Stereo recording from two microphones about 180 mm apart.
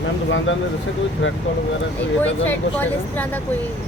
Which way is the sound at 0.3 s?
90° left.